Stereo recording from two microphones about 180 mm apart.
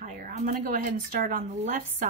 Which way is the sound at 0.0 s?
45° right (ahead or behind).